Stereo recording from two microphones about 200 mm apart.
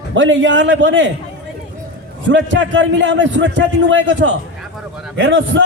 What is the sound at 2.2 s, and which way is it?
A man's voice, 65° right (ahead or behind).